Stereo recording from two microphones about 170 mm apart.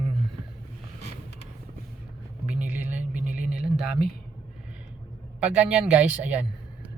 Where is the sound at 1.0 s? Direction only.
40° right (ahead or behind).